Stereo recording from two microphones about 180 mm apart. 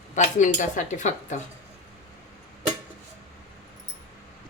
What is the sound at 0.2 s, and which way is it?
Speech, 45° left (ahead or behind).